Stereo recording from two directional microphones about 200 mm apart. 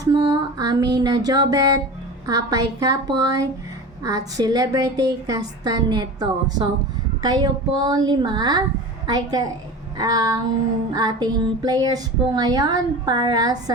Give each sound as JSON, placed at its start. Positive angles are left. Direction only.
{"t": 0.0, "sound": "female singing", "side_deg": -20}
{"t": 2.2, "sound": "a woman's voice", "side_deg": -15}
{"t": 4.4, "sound": "female singing", "side_deg": -20}
{"t": 10.0, "sound": "a woman's voice", "side_deg": -20}
{"t": 10.9, "sound": "female singing", "side_deg": -20}